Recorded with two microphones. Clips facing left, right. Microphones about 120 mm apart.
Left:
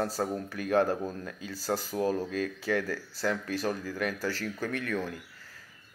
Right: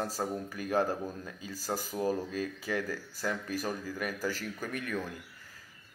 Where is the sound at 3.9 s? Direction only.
10° right (ahead or behind).